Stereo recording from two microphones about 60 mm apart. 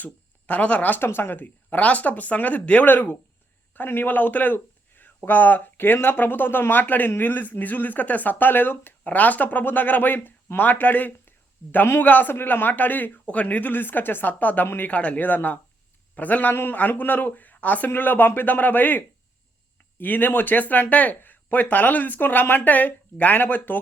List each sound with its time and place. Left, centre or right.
0.0 s a man's voice: left
9.0 s a man's voice: left